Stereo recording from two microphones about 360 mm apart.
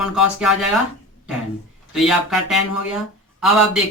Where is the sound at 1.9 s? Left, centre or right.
Centre.